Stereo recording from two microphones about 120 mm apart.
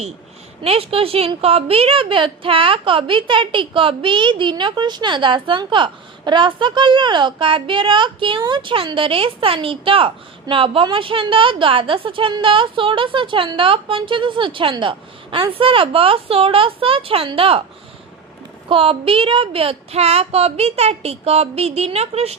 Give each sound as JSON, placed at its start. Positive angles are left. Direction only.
{"t": 0.6, "sound": "a woman's voice", "side_deg": -55}
{"t": 18.7, "sound": "speech", "side_deg": -50}